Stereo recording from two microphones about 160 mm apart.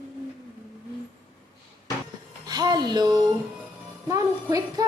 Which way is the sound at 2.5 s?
25° right (ahead or behind).